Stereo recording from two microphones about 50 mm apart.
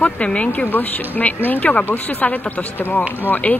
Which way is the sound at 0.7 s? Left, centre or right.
Left.